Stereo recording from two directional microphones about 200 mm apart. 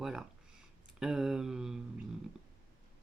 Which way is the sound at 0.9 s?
5° right (ahead or behind).